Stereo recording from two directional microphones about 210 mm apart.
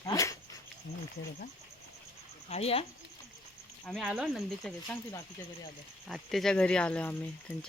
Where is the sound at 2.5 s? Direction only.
30° left (ahead or behind).